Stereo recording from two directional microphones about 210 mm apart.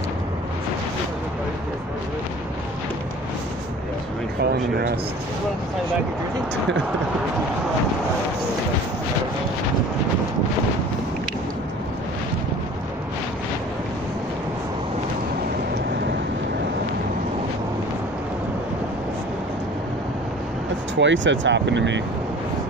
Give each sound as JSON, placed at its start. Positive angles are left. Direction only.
{"t": 4.5, "sound": "speech", "side_deg": -50}
{"t": 20.9, "sound": "speech", "side_deg": -60}